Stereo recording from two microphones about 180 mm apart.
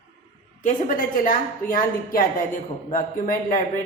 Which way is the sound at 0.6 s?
45° left (ahead or behind).